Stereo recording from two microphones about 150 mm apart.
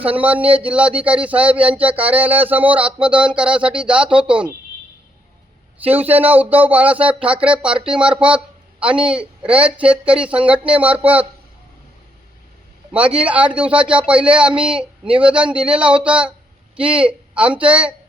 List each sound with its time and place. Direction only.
0.0 s speech: 10° right (ahead or behind)
5.8 s speech: 10° right (ahead or behind)
12.9 s speech: 10° right (ahead or behind)